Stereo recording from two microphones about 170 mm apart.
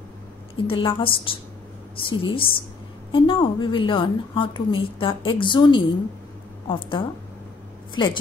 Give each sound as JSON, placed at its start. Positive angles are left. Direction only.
{"t": 0.7, "sound": "a woman's voice", "side_deg": 30}